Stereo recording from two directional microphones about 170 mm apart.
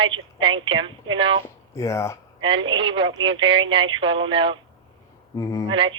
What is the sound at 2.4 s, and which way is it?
Speech, 30° right (ahead or behind).